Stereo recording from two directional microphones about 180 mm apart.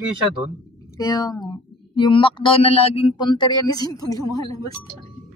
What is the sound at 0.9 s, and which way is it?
Speech, 20° left (ahead or behind).